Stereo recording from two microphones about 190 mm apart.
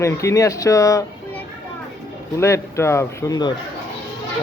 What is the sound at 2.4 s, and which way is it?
Speech, 15° left (ahead or behind).